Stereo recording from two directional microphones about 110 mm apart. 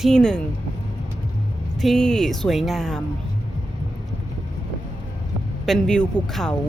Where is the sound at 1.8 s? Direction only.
5° left (ahead or behind).